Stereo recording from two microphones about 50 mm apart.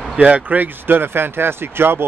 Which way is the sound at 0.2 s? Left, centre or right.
Right.